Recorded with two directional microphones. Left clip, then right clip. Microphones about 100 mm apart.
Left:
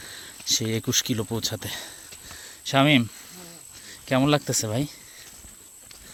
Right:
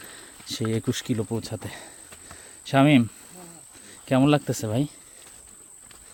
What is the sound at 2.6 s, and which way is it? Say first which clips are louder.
Speech: even; 50° right (ahead or behind).